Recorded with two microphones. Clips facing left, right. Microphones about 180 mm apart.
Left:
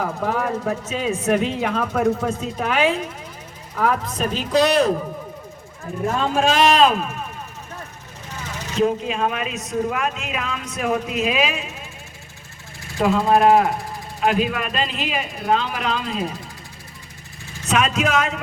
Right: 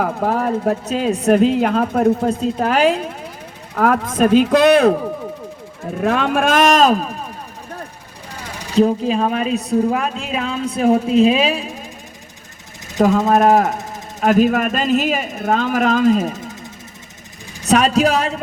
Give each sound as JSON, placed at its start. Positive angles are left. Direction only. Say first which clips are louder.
{"t": 0.0, "sound": "speech", "louder": "right 4 dB", "side_deg": -40}
{"t": 3.8, "sound": "speech", "louder": "right 6 dB", "side_deg": -50}
{"t": 6.0, "sound": "speech", "louder": "right 3 dB", "side_deg": -70}
{"t": 8.7, "sound": "speech", "louder": "right 6 dB", "side_deg": -35}
{"t": 13.0, "sound": "speech", "louder": "right 3 dB", "side_deg": -45}
{"t": 17.7, "sound": "speech", "louder": "right 6 dB", "side_deg": -35}